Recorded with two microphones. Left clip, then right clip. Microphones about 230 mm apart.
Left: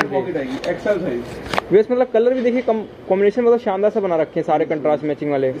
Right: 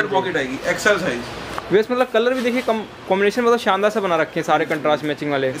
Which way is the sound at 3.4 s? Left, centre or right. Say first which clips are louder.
Left 1 dB; right.